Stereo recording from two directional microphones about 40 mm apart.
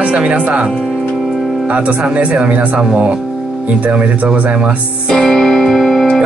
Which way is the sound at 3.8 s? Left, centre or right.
Right.